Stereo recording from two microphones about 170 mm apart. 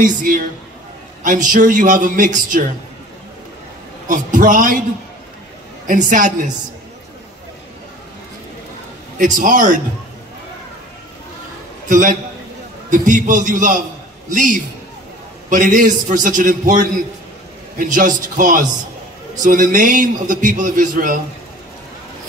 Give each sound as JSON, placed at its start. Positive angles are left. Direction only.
{"t": 0.0, "sound": "a man's voice", "side_deg": -50}
{"t": 4.1, "sound": "a man's voice", "side_deg": -50}
{"t": 5.9, "sound": "a man's voice", "side_deg": -50}
{"t": 9.2, "sound": "a man's voice", "side_deg": -50}
{"t": 11.9, "sound": "a man's voice", "side_deg": -50}